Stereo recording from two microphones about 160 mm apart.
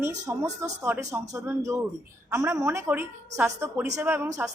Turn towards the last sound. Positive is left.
turn(degrees=-15)  # may be behind; listen again after turning